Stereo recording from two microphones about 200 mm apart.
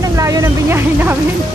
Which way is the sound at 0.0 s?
15° right (ahead or behind).